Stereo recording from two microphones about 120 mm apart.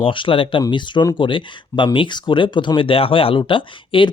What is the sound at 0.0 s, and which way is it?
Speech, 45° left (ahead or behind).